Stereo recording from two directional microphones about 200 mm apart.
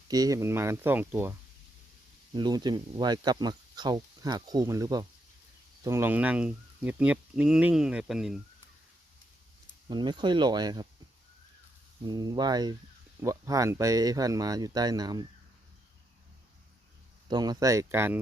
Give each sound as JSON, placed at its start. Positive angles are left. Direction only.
{"t": 0.1, "sound": "speech", "side_deg": -15}
{"t": 2.3, "sound": "speech", "side_deg": -20}
{"t": 9.9, "sound": "speech", "side_deg": -20}
{"t": 12.0, "sound": "speech", "side_deg": -20}
{"t": 17.2, "sound": "speech", "side_deg": -20}